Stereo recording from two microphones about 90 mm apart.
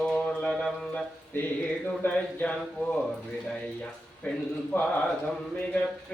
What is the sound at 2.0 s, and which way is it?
Speech, 15° left (ahead or behind).